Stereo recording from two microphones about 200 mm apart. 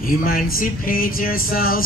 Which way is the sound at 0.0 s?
45° left (ahead or behind).